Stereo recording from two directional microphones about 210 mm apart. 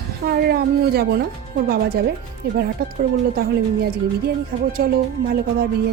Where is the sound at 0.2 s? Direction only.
45° right (ahead or behind).